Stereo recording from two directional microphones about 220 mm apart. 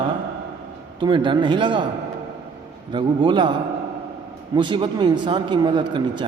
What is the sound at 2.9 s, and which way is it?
Speech, 20° right (ahead or behind).